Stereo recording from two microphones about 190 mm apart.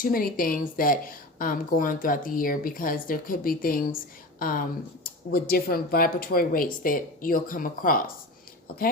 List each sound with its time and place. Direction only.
0.0 s a woman's voice: 50° left (ahead or behind)